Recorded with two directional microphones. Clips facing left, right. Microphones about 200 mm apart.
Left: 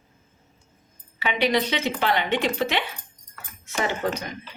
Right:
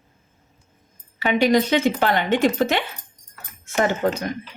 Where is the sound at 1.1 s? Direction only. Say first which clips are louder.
Right 5 dB; 45° right (ahead or behind).